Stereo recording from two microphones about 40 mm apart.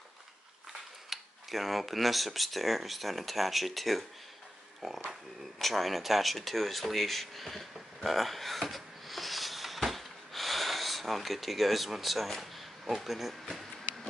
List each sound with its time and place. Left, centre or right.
1.1 s speech: centre